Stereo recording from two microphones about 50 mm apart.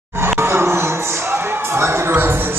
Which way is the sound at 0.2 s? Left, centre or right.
Right.